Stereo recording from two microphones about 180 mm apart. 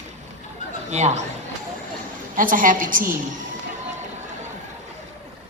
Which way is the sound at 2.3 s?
50° right (ahead or behind).